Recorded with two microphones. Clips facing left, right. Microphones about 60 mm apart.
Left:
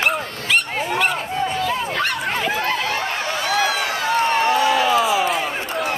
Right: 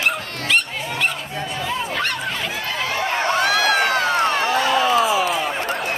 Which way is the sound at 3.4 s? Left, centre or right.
Right.